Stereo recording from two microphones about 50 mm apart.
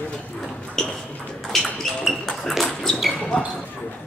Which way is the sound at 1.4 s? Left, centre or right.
Centre.